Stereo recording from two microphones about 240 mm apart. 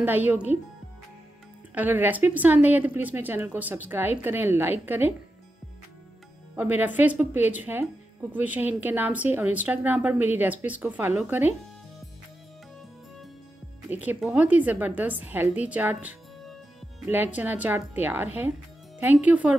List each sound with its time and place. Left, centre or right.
0.0 s a woman's voice: centre
1.8 s a woman's voice: centre
6.5 s a woman's voice: centre
13.8 s a woman's voice: centre